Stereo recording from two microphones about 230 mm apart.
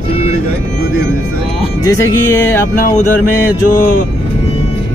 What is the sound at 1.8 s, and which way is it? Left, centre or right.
Speech, centre.